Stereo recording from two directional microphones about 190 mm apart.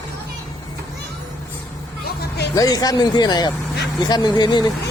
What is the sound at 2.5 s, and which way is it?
Speech, 20° left (ahead or behind).